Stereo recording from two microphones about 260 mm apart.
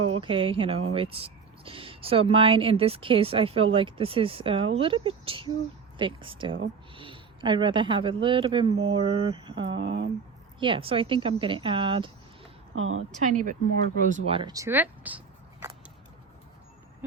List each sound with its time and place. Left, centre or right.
0.2 s speech: centre
12.7 s a woman's voice: right
13.2 s speech: right; by 15.2 s centre